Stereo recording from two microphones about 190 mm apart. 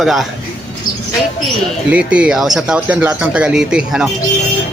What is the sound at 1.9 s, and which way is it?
Speech, 5° right (ahead or behind).